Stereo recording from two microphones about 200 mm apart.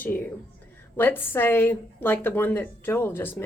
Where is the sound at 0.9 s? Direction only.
10° left (ahead or behind).